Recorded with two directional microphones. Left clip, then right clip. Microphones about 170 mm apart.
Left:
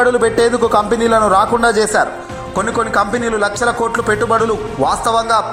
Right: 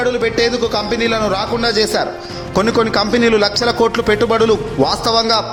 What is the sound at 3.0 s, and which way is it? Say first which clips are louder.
A man's voice: right 2 dB; 25° right (ahead or behind).